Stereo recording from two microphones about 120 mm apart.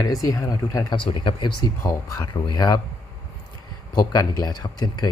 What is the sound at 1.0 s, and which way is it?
A man's voice, 45° left (ahead or behind).